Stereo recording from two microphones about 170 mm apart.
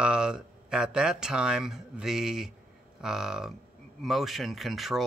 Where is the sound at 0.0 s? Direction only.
5° right (ahead or behind).